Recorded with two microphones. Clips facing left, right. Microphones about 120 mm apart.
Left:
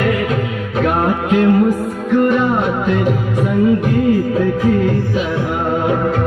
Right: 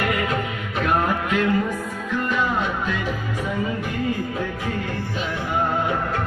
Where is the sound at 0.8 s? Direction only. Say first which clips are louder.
Left 5 dB; 65° left (ahead or behind).